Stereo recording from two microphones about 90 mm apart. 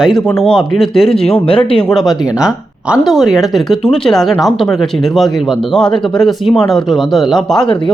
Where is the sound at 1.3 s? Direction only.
85° left.